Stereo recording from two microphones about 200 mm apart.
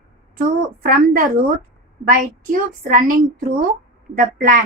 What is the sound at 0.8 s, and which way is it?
A woman's voice, 45° right (ahead or behind).